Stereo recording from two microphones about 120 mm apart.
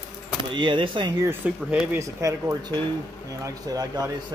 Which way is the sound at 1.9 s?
25° right (ahead or behind).